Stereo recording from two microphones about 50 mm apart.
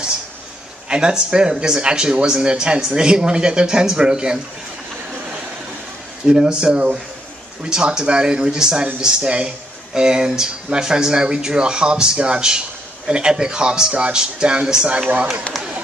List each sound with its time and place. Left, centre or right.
0.8 s speech: centre
6.2 s speech: centre